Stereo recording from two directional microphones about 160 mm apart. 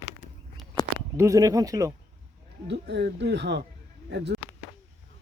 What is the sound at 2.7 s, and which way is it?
Speech, 90° right.